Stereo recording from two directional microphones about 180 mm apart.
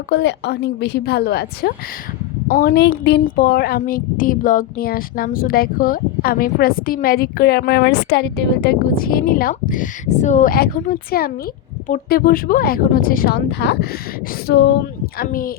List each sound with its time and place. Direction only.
0.1 s a woman's voice: 75° left (ahead or behind)
2.5 s a woman's voice: 50° left (ahead or behind); by 14.8 s 70° left (ahead or behind)
15.2 s a woman's voice: 55° left (ahead or behind)